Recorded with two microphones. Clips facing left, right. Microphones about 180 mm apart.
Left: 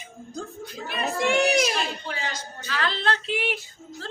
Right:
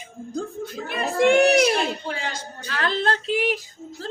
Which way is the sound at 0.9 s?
55° right (ahead or behind).